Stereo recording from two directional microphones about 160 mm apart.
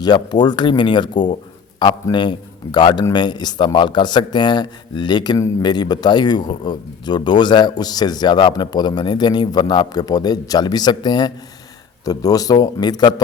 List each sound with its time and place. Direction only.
0.0 s a man's voice: 25° left (ahead or behind)